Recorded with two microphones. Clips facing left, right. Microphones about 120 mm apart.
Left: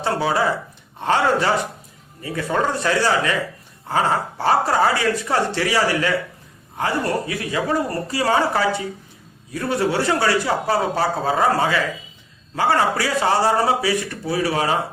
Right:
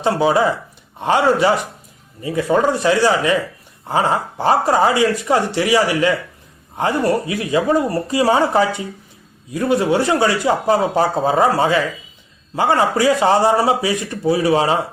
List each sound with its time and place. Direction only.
0.0 s a man's voice: 20° right (ahead or behind)